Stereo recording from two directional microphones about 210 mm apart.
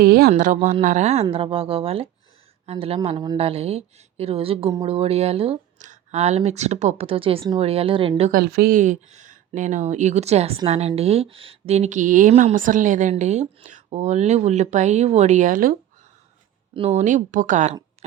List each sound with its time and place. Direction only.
0.0 s speech: 45° right (ahead or behind); by 8.3 s 25° right (ahead or behind)
8.3 s speech: 45° right (ahead or behind)
16.7 s speech: 30° right (ahead or behind)